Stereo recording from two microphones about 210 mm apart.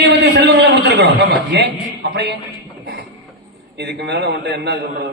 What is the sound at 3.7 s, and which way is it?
A man's voice, 50° right (ahead or behind).